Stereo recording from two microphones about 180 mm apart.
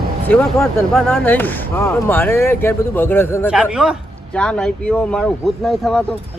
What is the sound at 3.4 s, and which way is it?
Speech, 5° right (ahead or behind).